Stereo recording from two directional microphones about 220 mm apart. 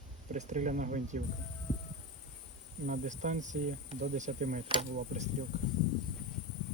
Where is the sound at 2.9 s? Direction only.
35° right (ahead or behind).